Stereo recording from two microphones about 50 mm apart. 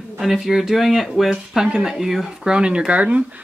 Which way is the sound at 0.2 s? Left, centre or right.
Centre.